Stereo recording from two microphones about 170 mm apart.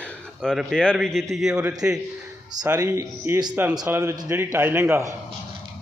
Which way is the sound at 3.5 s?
10° right (ahead or behind).